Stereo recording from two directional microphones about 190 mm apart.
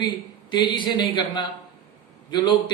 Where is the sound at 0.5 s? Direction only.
25° left (ahead or behind).